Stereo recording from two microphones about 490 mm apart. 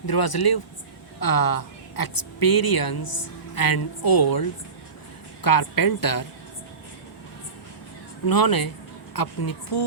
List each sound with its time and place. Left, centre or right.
0.0 s a woman's voice: left
8.3 s a woman's voice: left